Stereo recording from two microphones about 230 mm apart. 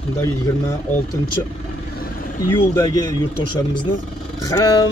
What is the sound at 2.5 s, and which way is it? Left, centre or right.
Speech, centre.